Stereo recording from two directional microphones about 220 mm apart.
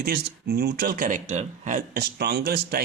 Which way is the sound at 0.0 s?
45° right (ahead or behind).